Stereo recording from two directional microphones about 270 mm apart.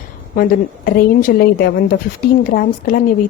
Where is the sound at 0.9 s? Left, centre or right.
Left.